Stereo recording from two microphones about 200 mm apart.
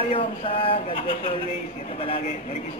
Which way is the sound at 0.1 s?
25° left (ahead or behind).